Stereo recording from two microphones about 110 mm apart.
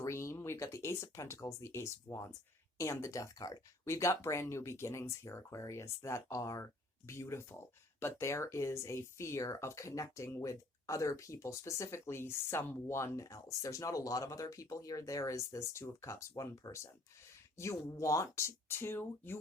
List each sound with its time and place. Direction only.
0.0 s speech: 25° left (ahead or behind)